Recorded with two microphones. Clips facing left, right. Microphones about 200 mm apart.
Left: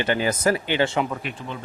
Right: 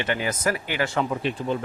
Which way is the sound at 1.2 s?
30° right (ahead or behind).